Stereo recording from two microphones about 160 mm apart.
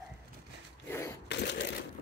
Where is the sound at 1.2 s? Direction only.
90° left.